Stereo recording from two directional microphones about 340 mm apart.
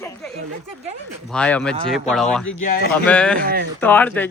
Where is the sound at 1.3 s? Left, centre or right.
Centre.